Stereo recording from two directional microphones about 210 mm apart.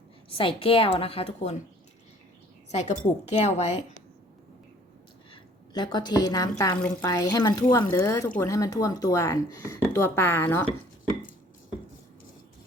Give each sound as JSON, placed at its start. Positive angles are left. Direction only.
{"t": 0.3, "sound": "a woman's voice", "side_deg": 25}
{"t": 2.7, "sound": "speech", "side_deg": 35}
{"t": 5.3, "sound": "a woman's voice", "side_deg": 20}